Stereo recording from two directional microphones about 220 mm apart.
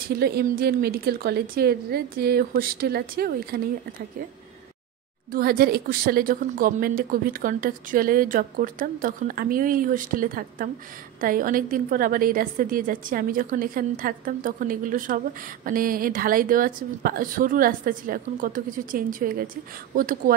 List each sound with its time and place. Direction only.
0.1 s a woman's voice: 45° right (ahead or behind)
5.3 s a woman's voice: 45° right (ahead or behind)